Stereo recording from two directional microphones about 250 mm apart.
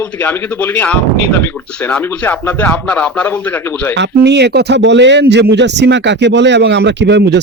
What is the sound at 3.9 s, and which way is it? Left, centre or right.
A man's voice, right.